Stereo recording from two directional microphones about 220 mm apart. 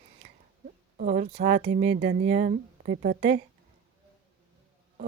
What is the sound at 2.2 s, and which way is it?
A woman's voice, 35° right (ahead or behind).